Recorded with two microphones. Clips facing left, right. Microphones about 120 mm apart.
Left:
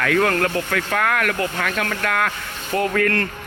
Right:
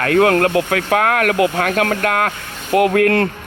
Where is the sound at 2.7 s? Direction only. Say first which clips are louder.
Right 7 dB; 60° right (ahead or behind).